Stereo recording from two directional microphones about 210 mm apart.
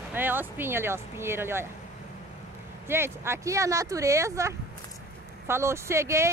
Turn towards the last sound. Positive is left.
turn(degrees=-15)  # may be behind; listen again after turning